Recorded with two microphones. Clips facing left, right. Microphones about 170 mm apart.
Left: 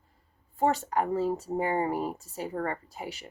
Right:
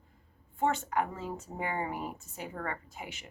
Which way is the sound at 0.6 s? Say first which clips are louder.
Left 4 dB; 35° left (ahead or behind).